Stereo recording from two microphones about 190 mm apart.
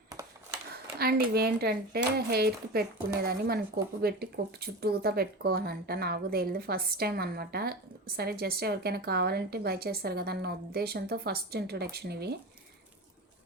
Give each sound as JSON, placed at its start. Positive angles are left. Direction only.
{"t": 0.9, "sound": "speech", "side_deg": -55}